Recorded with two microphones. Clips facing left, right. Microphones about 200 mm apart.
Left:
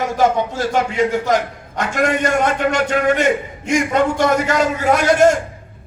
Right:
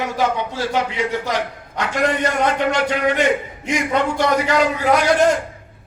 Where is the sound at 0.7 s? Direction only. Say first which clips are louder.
Left 5 dB; 45° left (ahead or behind).